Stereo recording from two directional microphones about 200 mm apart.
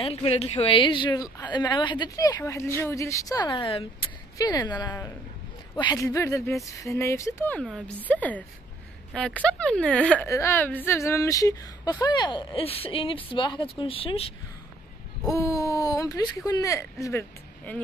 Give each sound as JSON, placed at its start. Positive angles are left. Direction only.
{"t": 0.0, "sound": "a woman's voice", "side_deg": 30}
{"t": 15.3, "sound": "speech", "side_deg": 15}